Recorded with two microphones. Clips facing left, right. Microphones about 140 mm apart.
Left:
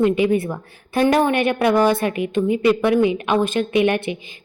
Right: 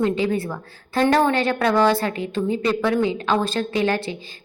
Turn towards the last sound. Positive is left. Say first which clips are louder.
# left 4 dB
turn(degrees=20)  # may be behind; listen again after turning